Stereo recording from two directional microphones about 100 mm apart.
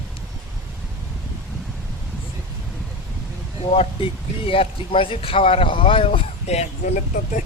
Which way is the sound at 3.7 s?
80° left.